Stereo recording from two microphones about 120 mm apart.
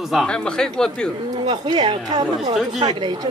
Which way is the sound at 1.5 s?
40° right (ahead or behind).